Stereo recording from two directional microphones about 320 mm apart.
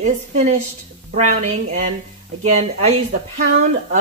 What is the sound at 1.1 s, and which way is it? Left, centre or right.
Mantra, right.